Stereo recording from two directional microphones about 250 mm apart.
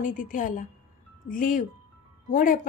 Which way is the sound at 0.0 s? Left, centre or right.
Left.